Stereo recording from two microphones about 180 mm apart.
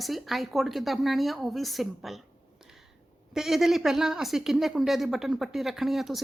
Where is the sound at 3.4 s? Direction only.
Centre (ahead or behind).